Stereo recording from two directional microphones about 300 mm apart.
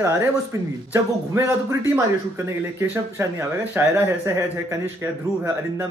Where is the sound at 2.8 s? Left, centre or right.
Centre.